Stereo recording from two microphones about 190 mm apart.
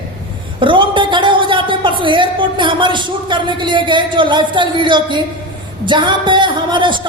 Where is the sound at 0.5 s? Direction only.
25° right (ahead or behind).